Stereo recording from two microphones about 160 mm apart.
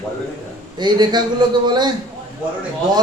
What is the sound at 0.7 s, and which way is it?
A man's voice, 25° right (ahead or behind).